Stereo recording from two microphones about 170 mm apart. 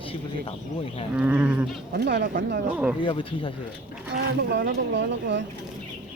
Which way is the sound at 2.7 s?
10° right (ahead or behind).